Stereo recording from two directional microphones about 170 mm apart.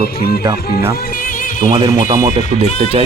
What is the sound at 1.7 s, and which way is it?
Speech, 25° right (ahead or behind).